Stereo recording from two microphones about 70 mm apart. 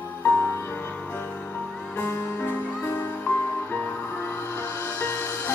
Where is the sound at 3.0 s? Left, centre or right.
Left.